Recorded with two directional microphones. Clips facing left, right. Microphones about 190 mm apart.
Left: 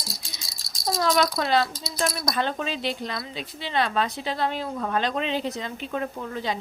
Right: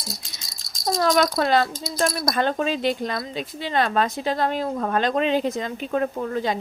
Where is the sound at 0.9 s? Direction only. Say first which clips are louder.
Right 3 dB; 50° right (ahead or behind).